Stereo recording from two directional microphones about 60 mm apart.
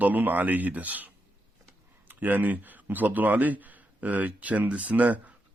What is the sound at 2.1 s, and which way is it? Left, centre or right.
Speech, right.